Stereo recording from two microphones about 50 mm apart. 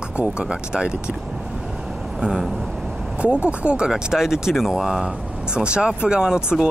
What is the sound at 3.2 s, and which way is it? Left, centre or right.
Speech, right.